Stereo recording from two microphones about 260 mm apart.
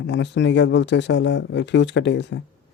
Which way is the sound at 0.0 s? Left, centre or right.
Left.